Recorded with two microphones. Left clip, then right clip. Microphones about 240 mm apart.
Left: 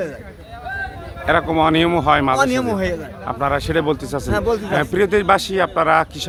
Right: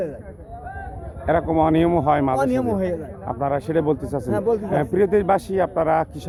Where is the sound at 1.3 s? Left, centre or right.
Centre.